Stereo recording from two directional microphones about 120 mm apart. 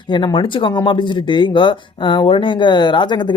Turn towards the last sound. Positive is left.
turn(degrees=40)  # may be behind; listen again after turning